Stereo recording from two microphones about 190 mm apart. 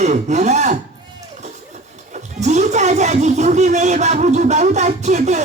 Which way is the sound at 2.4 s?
35° right (ahead or behind).